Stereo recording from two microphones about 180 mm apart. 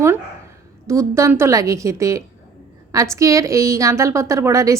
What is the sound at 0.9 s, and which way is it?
A woman's voice, 15° right (ahead or behind).